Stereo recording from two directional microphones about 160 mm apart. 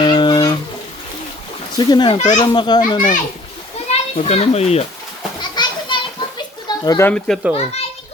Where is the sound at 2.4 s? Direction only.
25° left (ahead or behind).